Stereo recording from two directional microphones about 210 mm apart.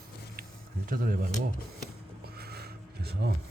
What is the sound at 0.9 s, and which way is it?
Speech, 40° right (ahead or behind).